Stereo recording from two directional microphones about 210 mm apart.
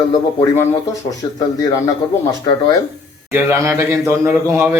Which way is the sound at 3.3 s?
15° right (ahead or behind).